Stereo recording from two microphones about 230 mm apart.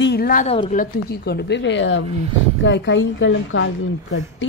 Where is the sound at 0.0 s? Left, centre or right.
Left.